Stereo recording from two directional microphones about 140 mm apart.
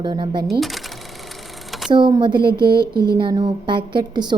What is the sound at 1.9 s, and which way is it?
A woman's voice, 35° right (ahead or behind).